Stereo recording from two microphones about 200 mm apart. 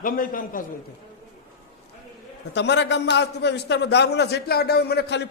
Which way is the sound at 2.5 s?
60° left (ahead or behind).